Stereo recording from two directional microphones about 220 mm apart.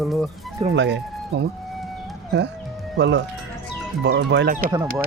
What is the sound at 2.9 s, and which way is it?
Speech, 50° right (ahead or behind).